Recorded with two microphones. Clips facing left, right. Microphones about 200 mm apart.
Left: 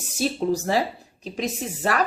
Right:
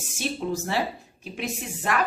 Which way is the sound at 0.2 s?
35° left (ahead or behind).